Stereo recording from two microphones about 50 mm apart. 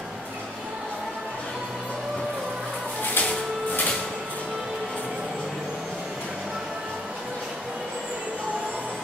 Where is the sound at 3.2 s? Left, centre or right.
Left.